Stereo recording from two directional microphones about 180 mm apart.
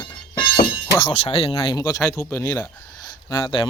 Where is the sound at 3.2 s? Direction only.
25° left (ahead or behind).